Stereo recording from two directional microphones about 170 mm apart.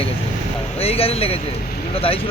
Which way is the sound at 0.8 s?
35° left (ahead or behind).